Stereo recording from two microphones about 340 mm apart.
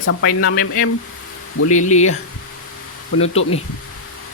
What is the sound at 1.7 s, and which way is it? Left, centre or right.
Speech, left.